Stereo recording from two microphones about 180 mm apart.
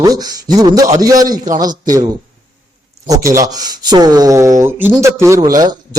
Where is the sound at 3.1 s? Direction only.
20° right (ahead or behind).